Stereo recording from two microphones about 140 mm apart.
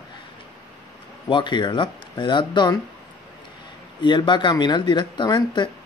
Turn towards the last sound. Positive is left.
turn(degrees=35)  # may be behind; listen again after turning